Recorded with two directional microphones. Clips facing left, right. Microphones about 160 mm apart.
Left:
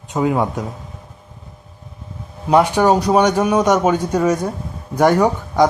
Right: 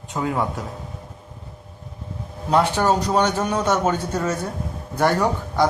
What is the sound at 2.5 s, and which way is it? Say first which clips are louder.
A man's voice: left 5 dB; 15° left (ahead or behind).